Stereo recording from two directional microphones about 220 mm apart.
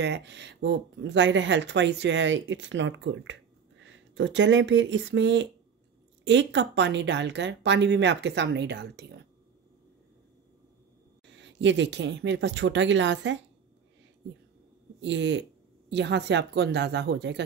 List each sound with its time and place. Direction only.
0.0 s speech: 50° right (ahead or behind)
11.2 s speech: 55° right (ahead or behind)
15.0 s speech: 55° right (ahead or behind)